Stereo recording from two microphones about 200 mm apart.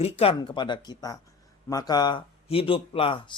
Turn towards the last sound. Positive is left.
turn(degrees=25)  # may be behind; listen again after turning